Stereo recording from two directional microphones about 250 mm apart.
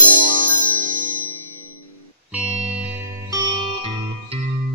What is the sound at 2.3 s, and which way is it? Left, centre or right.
Music, centre.